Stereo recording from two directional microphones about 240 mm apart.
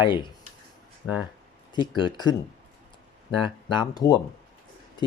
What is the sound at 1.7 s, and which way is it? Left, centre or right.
Speech, centre.